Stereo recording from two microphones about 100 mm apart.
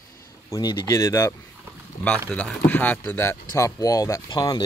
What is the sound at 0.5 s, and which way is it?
Speech, 35° left (ahead or behind).